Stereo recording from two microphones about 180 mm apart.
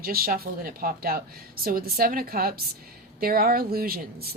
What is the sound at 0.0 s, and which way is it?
A woman's voice, 55° right (ahead or behind).